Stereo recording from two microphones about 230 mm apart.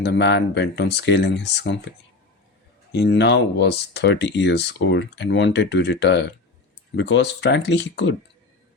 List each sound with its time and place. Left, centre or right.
0.0 s speech: left
2.9 s speech: left